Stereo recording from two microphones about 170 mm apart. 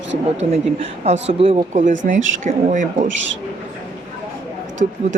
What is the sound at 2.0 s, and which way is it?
Speech, 45° right (ahead or behind).